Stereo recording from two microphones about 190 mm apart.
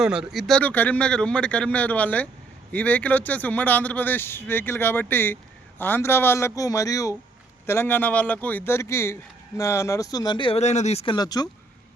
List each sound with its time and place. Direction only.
0.0 s speech: 5° right (ahead or behind); by 11.4 s 20° left (ahead or behind)